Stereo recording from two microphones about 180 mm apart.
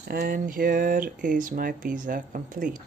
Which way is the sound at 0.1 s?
55° right (ahead or behind).